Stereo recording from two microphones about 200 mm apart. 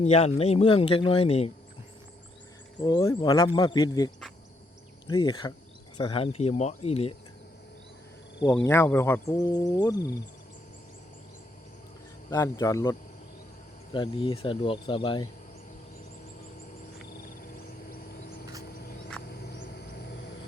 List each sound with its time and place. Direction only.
0.0 s speech: 30° left (ahead or behind)
2.8 s speech: 15° left (ahead or behind)
8.4 s speech: 10° left (ahead or behind)
12.3 s speech: 15° left (ahead or behind)
19.3 s vehicle: 50° left (ahead or behind)